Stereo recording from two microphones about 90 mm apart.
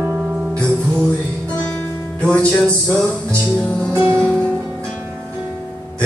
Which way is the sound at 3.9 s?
25° right (ahead or behind).